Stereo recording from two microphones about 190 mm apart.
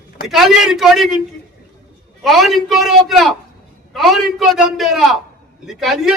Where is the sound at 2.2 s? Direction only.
Centre (ahead or behind).